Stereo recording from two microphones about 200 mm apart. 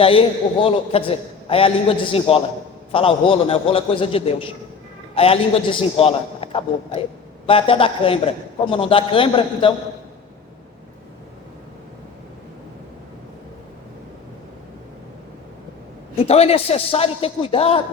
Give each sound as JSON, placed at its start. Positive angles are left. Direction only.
{"t": 0.0, "sound": "a man's voice", "side_deg": 25}
{"t": 16.1, "sound": "a man's voice", "side_deg": 30}